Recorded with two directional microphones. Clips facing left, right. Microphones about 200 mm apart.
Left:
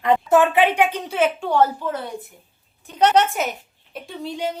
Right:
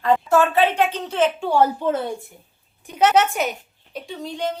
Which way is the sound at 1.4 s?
10° right (ahead or behind).